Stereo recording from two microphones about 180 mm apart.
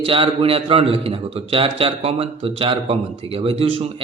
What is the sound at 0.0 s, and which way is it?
A man's voice, 30° right (ahead or behind).